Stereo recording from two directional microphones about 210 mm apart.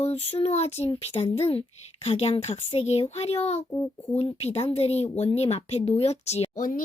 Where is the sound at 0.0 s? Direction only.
30° left (ahead or behind).